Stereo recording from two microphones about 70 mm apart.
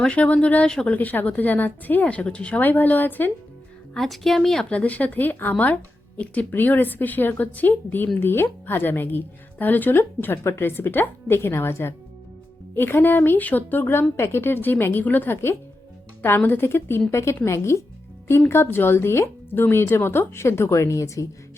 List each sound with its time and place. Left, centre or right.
0.0 s speech: centre
0.7 s a woman's voice: centre
0.9 s speech: left
3.9 s speech: centre
4.7 s speech: left